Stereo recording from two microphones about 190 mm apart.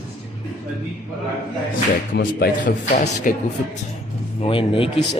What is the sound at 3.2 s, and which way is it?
Speech, 45° left (ahead or behind).